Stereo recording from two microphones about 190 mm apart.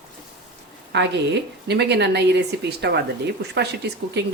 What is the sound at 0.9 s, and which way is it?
Speech, 65° right (ahead or behind).